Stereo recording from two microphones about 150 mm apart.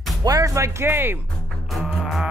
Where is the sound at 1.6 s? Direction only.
Centre (ahead or behind).